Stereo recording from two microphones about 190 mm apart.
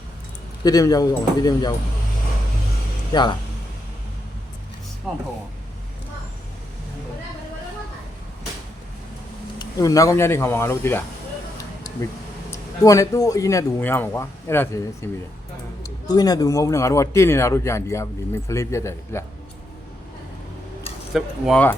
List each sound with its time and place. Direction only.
0.6 s speech: 20° left (ahead or behind)
3.1 s speech: 25° left (ahead or behind)
5.1 s speech: centre (ahead or behind)
9.6 s a man's voice: 20° left (ahead or behind)
12.5 s a man's voice: 15° left (ahead or behind)
21.1 s speech: centre (ahead or behind)